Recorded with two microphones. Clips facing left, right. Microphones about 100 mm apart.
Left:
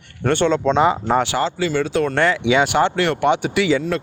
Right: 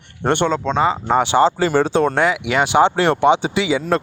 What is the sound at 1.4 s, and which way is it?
Speech, 35° right (ahead or behind).